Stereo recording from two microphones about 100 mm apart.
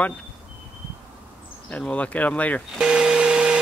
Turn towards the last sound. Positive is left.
turn(degrees=-10)  # may be behind; listen again after turning